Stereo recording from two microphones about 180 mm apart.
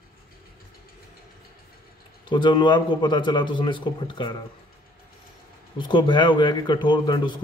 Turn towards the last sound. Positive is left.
turn(degrees=25)  # may be behind; listen again after turning